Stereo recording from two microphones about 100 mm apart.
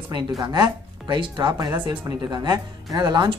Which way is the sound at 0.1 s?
40° right (ahead or behind).